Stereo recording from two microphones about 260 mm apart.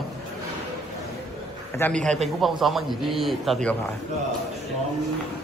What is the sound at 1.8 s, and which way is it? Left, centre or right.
A man's voice, centre.